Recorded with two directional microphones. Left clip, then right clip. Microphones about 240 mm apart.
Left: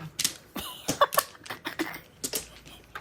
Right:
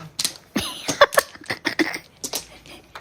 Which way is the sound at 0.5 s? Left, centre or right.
Right.